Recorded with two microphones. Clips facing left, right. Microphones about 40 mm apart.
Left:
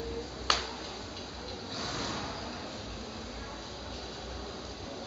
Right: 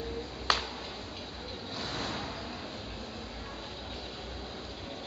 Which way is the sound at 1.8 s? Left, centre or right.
Right.